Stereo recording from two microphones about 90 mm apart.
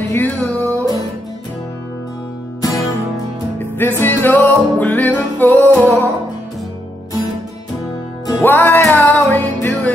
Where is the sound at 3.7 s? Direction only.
25° left (ahead or behind).